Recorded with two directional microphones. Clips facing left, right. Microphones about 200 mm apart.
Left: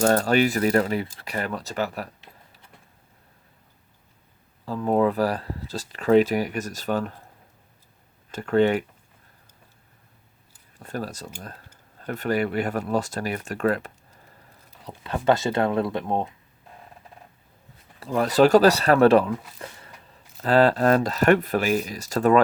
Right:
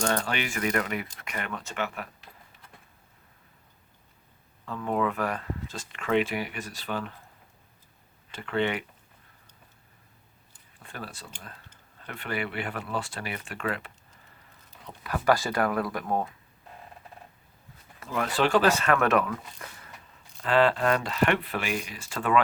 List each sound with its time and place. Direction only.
0.0 s speech: 40° left (ahead or behind)
2.3 s a sound: 20° left (ahead or behind)
4.6 s speech: 35° left (ahead or behind)
8.3 s speech: 40° left (ahead or behind)
10.8 s speech: 40° left (ahead or behind)
14.8 s speech: 25° left (ahead or behind)
18.0 s speech: 35° left (ahead or behind)
19.5 s a sound: 30° left (ahead or behind)
20.4 s speech: 40° left (ahead or behind)